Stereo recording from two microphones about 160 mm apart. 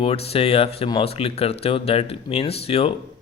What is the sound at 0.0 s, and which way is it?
Speech, 40° left (ahead or behind).